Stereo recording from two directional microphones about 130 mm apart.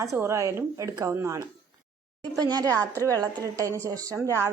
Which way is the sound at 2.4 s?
30° right (ahead or behind).